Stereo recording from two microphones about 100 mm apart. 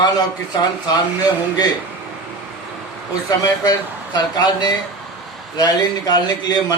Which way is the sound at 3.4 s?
40° left (ahead or behind).